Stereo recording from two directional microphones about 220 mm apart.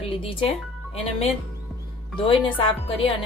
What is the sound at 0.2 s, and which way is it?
Speech, 25° left (ahead or behind).